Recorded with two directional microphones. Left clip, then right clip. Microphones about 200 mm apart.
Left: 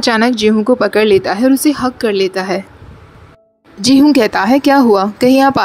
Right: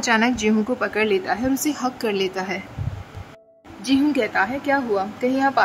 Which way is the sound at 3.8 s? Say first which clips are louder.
Left 11 dB; 40° left (ahead or behind).